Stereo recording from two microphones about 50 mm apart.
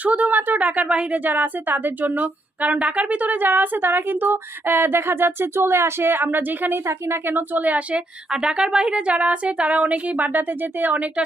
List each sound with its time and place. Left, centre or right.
0.0 s a woman's voice: right
1.2 s a woman's voice: right
6.8 s a woman's voice: right
8.3 s speech: centre; by 10.9 s right